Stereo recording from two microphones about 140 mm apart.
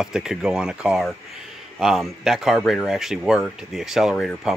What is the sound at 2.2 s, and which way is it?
Speech, centre (ahead or behind).